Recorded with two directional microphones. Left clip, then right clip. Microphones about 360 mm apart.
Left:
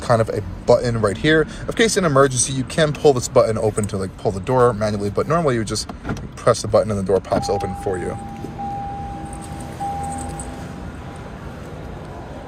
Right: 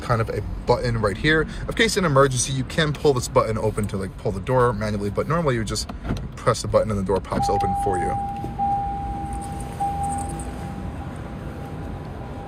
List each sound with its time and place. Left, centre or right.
0.1 s speech: centre